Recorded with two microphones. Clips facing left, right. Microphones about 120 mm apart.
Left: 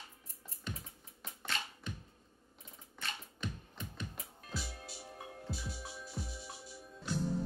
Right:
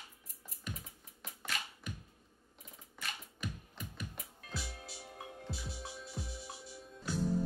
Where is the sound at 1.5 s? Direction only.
30° left (ahead or behind).